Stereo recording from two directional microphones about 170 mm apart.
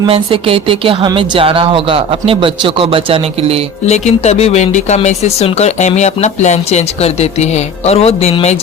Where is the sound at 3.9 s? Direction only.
40° left (ahead or behind).